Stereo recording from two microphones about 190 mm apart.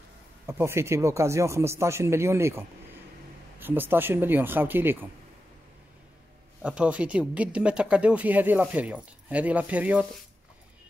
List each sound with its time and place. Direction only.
0.5 s speech: 15° right (ahead or behind)
6.6 s speech: 5° right (ahead or behind)